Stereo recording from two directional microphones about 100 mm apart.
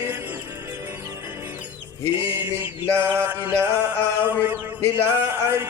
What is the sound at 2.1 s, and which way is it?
Mantra, 20° right (ahead or behind).